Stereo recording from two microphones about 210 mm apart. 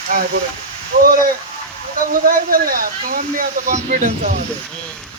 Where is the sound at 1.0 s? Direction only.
45° right (ahead or behind).